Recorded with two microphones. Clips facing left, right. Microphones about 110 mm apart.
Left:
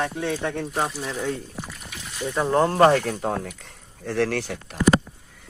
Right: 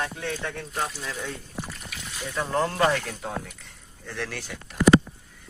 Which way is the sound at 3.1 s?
60° left (ahead or behind).